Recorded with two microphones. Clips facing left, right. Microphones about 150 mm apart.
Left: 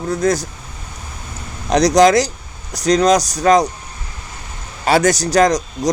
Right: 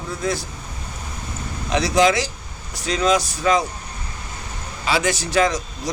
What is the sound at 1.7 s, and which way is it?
Speech, 40° left (ahead or behind).